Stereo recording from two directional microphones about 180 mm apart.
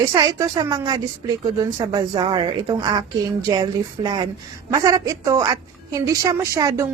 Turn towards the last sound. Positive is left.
turn(degrees=-15)  # may be behind; listen again after turning